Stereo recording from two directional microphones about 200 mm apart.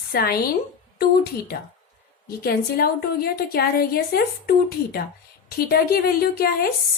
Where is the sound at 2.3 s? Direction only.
50° left (ahead or behind).